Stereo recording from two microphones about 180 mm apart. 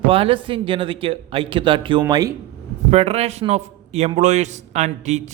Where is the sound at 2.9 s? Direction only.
35° right (ahead or behind).